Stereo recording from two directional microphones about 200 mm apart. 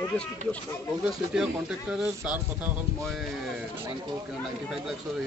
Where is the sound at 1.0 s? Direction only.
5° right (ahead or behind).